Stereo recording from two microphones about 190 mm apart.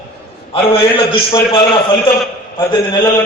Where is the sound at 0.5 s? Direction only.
30° left (ahead or behind).